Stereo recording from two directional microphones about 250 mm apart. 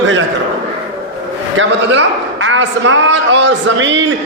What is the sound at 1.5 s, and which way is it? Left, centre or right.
A man's voice, right.